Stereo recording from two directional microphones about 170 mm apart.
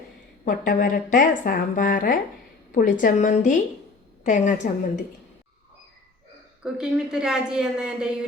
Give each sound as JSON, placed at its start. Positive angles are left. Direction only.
{"t": 0.4, "sound": "a woman's voice", "side_deg": 55}
{"t": 6.6, "sound": "a woman's voice", "side_deg": -5}